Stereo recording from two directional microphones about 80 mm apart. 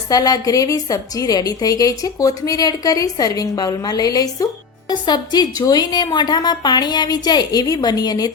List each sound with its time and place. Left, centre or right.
0.1 s a woman's voice: left
4.9 s a woman's voice: left